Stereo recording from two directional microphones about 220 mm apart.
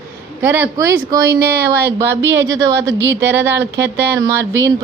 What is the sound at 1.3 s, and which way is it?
Speech, 45° right (ahead or behind).